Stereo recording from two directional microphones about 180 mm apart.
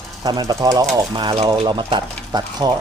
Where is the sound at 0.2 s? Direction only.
20° right (ahead or behind).